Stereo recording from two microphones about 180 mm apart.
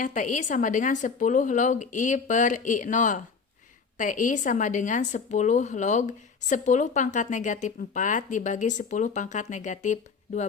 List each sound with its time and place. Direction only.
0.0 s a woman's voice: 45° left (ahead or behind)